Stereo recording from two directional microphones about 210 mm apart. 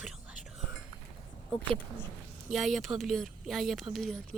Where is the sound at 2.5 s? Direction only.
Centre (ahead or behind).